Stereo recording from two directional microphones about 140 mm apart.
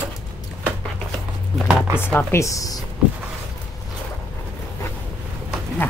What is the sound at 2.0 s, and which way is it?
Speech, 15° left (ahead or behind).